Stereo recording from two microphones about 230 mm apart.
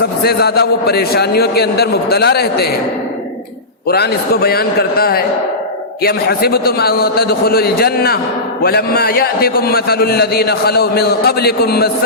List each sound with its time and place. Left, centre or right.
0.2 s a man's voice: left
3.8 s a man's voice: left